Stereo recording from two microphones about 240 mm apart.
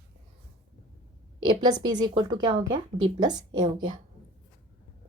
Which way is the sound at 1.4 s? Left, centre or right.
Centre.